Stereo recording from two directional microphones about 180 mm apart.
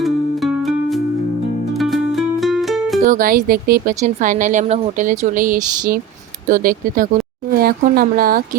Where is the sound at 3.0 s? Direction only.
50° right (ahead or behind).